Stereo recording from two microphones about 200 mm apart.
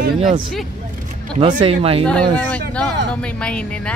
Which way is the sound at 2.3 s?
5° left (ahead or behind).